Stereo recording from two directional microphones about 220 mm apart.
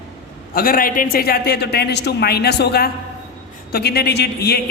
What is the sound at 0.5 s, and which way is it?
A man's voice, 40° left (ahead or behind).